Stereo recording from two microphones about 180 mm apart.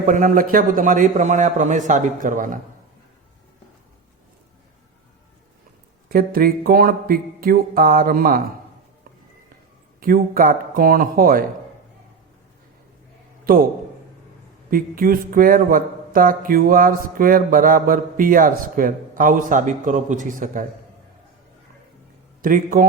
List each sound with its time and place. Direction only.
0.0 s speech: 50° right (ahead or behind)
6.1 s speech: 55° right (ahead or behind)
10.0 s speech: 50° right (ahead or behind)
13.4 s a man's voice: 50° right (ahead or behind)
14.7 s speech: 50° right (ahead or behind)
22.4 s speech: 50° right (ahead or behind)